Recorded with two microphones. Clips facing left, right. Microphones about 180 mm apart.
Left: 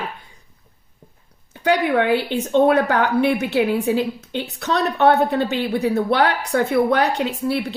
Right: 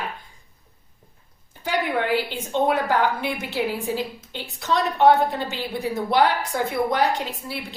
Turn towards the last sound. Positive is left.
turn(degrees=70)  # may be behind; listen again after turning